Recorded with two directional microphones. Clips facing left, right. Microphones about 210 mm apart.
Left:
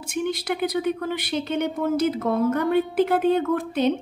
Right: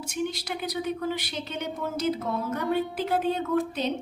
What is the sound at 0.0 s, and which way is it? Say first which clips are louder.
Speech: left 4 dB; 55° left (ahead or behind).